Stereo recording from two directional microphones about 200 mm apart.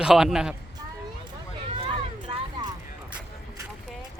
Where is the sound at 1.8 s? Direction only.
20° right (ahead or behind).